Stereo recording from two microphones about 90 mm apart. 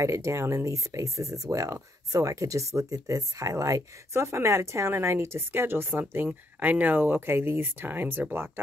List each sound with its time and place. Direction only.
0.0 s speech: 35° right (ahead or behind)